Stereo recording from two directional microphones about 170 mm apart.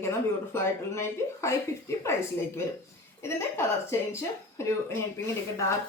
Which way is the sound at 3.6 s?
15° left (ahead or behind).